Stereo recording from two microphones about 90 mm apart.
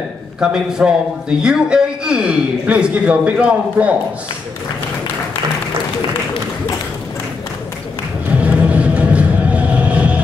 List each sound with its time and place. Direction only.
0.4 s a man's voice: 10° right (ahead or behind)
8.5 s music: 15° right (ahead or behind)